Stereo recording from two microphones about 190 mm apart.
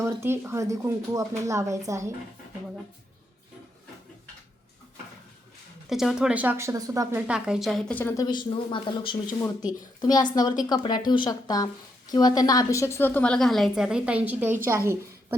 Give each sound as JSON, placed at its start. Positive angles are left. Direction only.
{"t": 0.0, "sound": "speech", "side_deg": -15}
{"t": 5.9, "sound": "speech", "side_deg": 0}
{"t": 7.3, "sound": "a woman's voice", "side_deg": -5}